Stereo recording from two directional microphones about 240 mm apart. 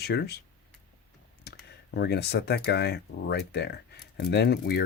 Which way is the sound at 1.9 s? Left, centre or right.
Left.